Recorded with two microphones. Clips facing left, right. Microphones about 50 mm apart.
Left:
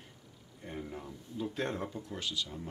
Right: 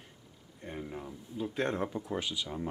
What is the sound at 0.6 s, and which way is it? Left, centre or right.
Speech, centre.